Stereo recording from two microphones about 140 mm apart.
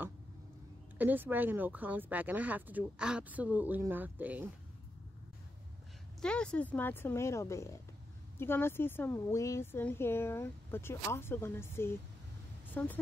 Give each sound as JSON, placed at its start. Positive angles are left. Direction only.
{"t": 0.9, "sound": "speech", "side_deg": -15}
{"t": 6.2, "sound": "speech", "side_deg": 5}